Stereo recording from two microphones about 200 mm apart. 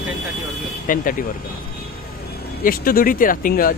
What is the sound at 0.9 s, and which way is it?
Speech, 45° left (ahead or behind).